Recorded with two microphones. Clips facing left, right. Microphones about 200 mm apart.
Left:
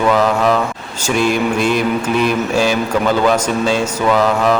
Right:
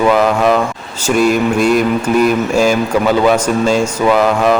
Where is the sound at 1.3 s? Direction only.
45° right (ahead or behind).